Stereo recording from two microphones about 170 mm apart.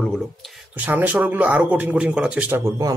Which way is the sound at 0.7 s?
10° right (ahead or behind).